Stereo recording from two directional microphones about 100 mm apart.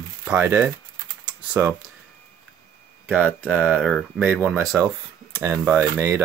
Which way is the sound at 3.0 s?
10° right (ahead or behind).